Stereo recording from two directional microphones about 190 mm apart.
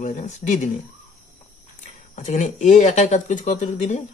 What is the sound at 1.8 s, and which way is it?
Speech, 40° left (ahead or behind).